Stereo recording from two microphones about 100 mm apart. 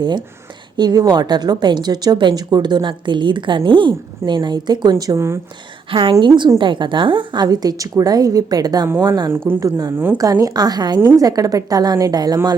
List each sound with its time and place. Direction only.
0.0 s a woman's voice: 50° right (ahead or behind); by 5.4 s 30° right (ahead or behind)
5.9 s a woman's voice: 60° right (ahead or behind)
6.1 s a woman's voice: 50° right (ahead or behind)